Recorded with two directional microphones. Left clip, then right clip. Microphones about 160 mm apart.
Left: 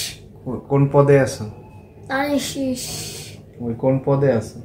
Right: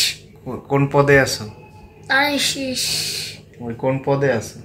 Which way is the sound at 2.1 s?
20° left (ahead or behind).